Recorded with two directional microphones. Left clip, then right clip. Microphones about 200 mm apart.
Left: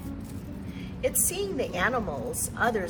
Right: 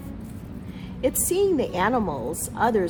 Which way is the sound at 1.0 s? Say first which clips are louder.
Right 7 dB; 50° right (ahead or behind).